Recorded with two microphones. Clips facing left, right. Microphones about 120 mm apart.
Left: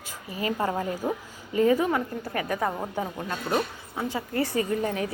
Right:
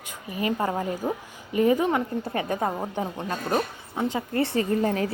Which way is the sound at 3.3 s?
40° right (ahead or behind).